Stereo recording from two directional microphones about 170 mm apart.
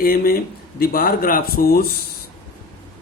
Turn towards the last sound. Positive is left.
turn(degrees=60)  # may be behind; listen again after turning